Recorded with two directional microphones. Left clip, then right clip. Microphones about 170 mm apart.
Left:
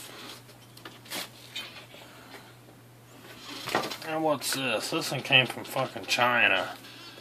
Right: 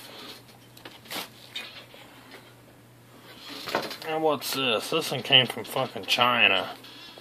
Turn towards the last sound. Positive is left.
turn(degrees=-35)  # may be behind; listen again after turning